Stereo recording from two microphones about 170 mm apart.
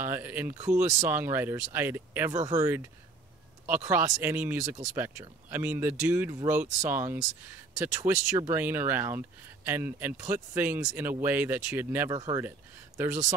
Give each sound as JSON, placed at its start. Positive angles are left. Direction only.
{"t": 0.0, "sound": "speech", "side_deg": -10}